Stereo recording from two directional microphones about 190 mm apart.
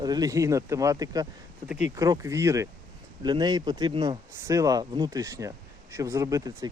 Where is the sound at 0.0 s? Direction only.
20° right (ahead or behind).